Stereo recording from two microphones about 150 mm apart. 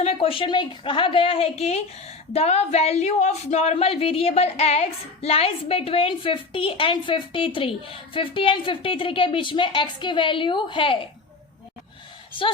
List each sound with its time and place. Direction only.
0.0 s speech: 40° left (ahead or behind)
12.3 s speech: 35° left (ahead or behind)